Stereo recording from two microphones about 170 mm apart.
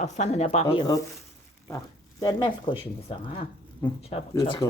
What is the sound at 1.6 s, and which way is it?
Speech, 20° left (ahead or behind).